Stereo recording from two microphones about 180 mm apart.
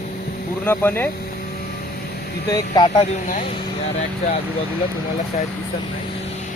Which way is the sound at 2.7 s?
25° left (ahead or behind).